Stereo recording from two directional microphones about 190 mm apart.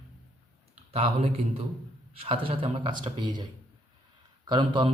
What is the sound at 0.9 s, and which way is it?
A man's voice, 30° right (ahead or behind).